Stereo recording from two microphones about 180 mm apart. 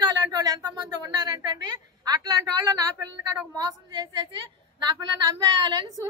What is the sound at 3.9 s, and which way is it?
A woman's voice, 20° right (ahead or behind).